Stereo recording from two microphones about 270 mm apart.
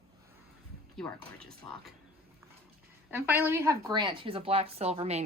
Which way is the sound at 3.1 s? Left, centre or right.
Centre.